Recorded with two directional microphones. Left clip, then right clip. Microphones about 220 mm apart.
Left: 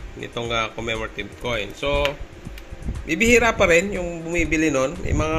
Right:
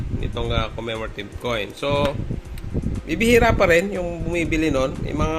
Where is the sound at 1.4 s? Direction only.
15° right (ahead or behind).